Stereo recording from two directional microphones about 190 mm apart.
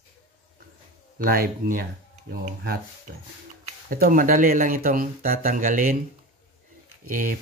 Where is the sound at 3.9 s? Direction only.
45° right (ahead or behind).